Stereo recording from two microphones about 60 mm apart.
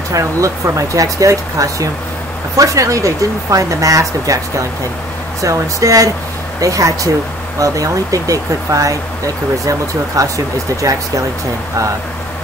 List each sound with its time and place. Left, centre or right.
0.1 s speech: right